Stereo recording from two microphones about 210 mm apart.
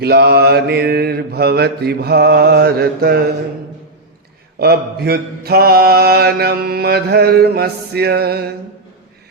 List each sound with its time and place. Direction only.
0.0 s mantra: 50° right (ahead or behind)
4.6 s mantra: 50° right (ahead or behind)